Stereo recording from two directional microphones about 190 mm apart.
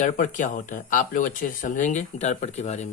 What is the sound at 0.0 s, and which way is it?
Speech, 45° left (ahead or behind).